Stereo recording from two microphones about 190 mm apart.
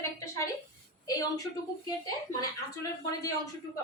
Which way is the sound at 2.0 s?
20° left (ahead or behind).